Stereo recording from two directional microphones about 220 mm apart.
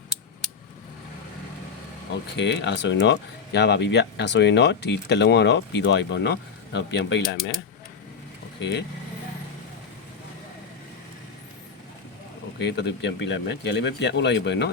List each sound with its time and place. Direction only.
2.3 s speech: 55° left (ahead or behind)
12.5 s speech: 50° left (ahead or behind)